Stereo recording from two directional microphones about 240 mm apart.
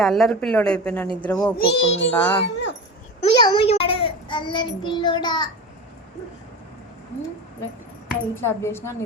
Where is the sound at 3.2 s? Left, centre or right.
Centre.